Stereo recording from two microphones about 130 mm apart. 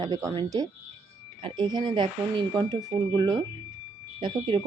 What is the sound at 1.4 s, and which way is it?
Speech, 40° right (ahead or behind).